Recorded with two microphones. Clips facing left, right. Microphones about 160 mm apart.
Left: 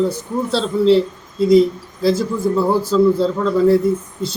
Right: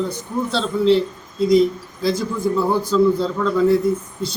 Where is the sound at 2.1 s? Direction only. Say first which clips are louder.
Left 4 dB; 30° left (ahead or behind).